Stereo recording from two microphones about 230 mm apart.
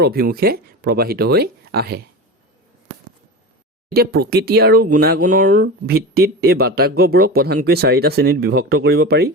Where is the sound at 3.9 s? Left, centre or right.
Right.